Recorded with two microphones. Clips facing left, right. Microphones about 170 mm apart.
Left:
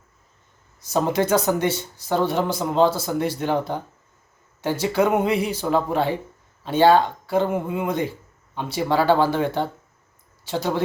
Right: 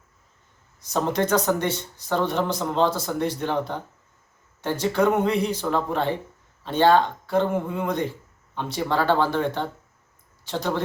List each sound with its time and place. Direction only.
0.9 s speech: 5° left (ahead or behind)